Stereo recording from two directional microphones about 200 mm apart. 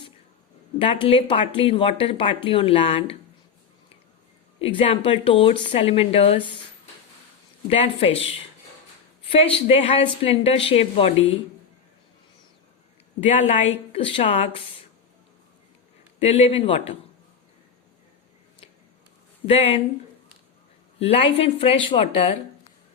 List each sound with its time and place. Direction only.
0.8 s speech: 25° left (ahead or behind)
4.6 s speech: 25° left (ahead or behind)
7.7 s speech: 30° left (ahead or behind)
9.3 s speech: 30° left (ahead or behind)
13.1 s speech: 30° left (ahead or behind)
16.2 s speech: 30° left (ahead or behind)
19.5 s speech: 30° left (ahead or behind)
21.0 s speech: 30° left (ahead or behind)